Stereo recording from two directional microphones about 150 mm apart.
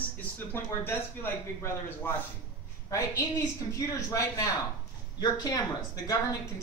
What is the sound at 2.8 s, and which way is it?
A woman's voice, 25° left (ahead or behind).